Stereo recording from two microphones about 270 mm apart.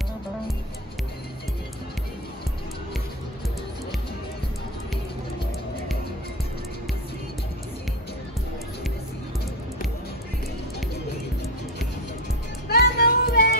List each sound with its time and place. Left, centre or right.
12.6 s music: left